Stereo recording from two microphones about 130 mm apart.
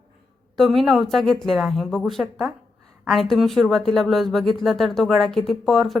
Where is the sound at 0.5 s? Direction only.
Centre (ahead or behind).